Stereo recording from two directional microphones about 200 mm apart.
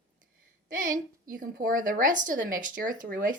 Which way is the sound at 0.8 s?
40° right (ahead or behind).